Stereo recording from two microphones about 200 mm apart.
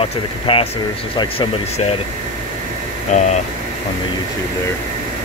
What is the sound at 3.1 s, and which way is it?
Speech, 40° left (ahead or behind).